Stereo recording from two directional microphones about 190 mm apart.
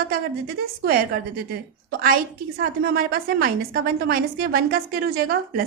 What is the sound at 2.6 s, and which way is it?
A woman's voice, 50° right (ahead or behind).